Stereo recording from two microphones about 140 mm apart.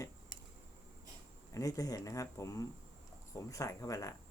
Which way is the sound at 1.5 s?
25° left (ahead or behind).